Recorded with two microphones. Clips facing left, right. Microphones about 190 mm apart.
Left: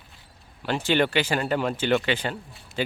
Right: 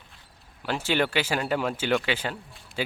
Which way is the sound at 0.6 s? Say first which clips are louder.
Left 3 dB; 5° right (ahead or behind).